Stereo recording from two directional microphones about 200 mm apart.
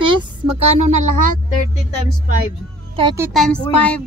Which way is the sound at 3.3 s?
5° left (ahead or behind).